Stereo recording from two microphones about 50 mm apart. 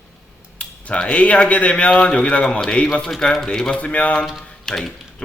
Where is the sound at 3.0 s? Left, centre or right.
Centre.